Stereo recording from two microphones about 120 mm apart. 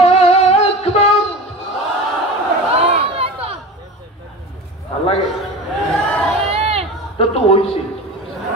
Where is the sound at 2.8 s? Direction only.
55° right (ahead or behind).